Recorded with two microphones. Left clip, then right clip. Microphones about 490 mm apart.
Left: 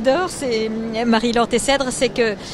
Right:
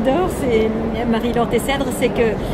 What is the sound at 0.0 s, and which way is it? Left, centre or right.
Speech, left.